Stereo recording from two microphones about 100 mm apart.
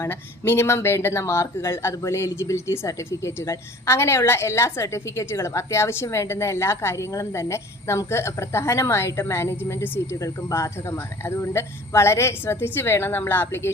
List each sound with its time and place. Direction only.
0.0 s speech: 25° left (ahead or behind)